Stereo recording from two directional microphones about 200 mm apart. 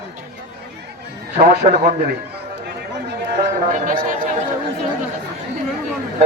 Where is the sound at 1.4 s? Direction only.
40° right (ahead or behind).